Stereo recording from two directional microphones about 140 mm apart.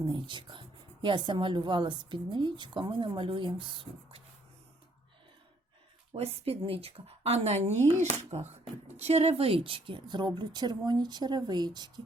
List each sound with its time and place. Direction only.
0.0 s a woman's voice: 35° right (ahead or behind)
6.1 s a woman's voice: 45° right (ahead or behind); by 11.9 s 30° right (ahead or behind)